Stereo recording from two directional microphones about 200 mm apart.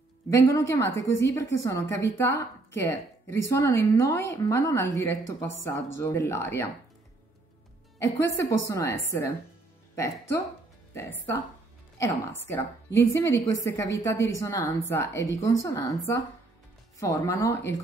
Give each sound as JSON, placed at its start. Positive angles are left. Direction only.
{"t": 0.3, "sound": "a woman's voice", "side_deg": 15}
{"t": 8.0, "sound": "a woman's voice", "side_deg": 15}